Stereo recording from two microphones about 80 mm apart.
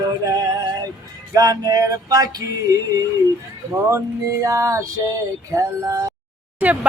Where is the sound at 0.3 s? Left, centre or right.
Right.